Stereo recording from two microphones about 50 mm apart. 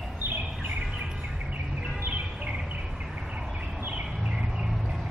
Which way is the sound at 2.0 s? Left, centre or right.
Right.